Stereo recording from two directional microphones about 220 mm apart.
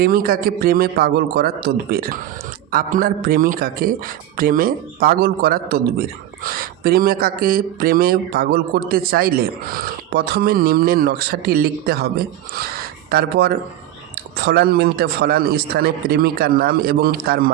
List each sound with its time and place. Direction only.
0.0 s a man's voice: 40° right (ahead or behind)